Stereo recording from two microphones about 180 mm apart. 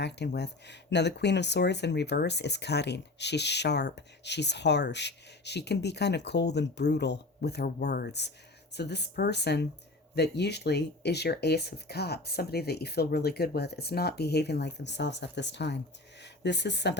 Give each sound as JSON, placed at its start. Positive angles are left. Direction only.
{"t": 0.0, "sound": "speech", "side_deg": 70}